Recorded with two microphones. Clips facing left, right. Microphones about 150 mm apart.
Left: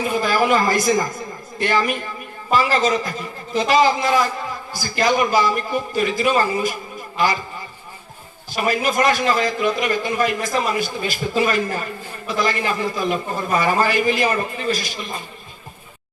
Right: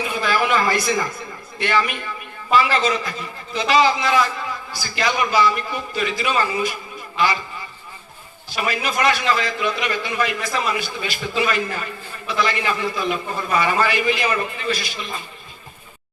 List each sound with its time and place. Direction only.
0.0 s a man's voice: 40° left (ahead or behind)
8.5 s a man's voice: 45° left (ahead or behind)